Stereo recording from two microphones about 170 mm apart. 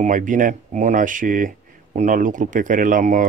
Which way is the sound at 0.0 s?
50° right (ahead or behind).